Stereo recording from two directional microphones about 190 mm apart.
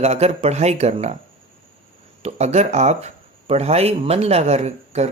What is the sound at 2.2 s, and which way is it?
Speech, 35° right (ahead or behind).